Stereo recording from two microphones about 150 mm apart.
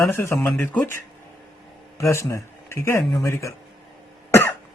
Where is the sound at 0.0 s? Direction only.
15° left (ahead or behind).